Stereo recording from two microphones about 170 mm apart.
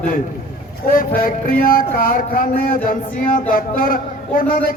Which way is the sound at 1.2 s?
55° left (ahead or behind).